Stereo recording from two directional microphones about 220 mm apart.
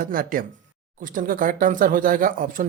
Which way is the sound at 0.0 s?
40° right (ahead or behind).